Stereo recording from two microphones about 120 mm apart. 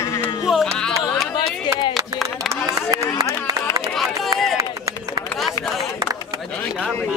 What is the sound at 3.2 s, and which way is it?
Run, 30° right (ahead or behind).